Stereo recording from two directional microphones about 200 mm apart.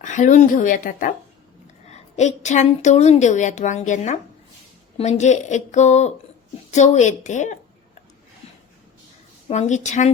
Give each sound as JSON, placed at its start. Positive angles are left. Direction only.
{"t": 0.0, "sound": "a woman's voice", "side_deg": 40}
{"t": 9.5, "sound": "a woman's voice", "side_deg": 35}